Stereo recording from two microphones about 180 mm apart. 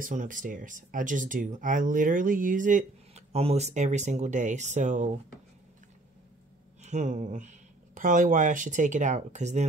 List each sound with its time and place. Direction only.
0.0 s speech: 45° right (ahead or behind)
6.8 s speech: 40° right (ahead or behind)